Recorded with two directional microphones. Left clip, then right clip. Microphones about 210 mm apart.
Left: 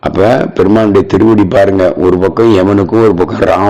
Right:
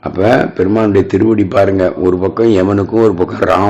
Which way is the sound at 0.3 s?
30° left (ahead or behind).